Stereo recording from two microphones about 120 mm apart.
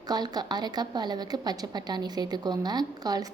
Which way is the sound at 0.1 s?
35° right (ahead or behind).